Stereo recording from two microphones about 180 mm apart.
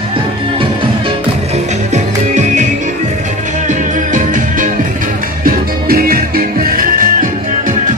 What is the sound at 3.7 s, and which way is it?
Music, 45° right (ahead or behind).